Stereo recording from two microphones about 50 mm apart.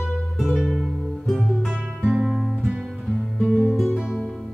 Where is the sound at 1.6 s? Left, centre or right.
Centre.